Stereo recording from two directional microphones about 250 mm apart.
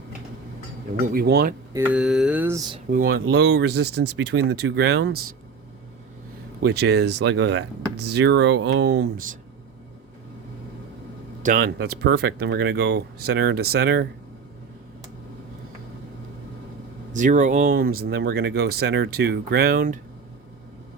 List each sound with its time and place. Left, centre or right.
0.9 s speech: right
1.7 s mantra: centre
2.9 s speech: right
6.6 s speech: right
11.4 s speech: right
17.1 s speech: right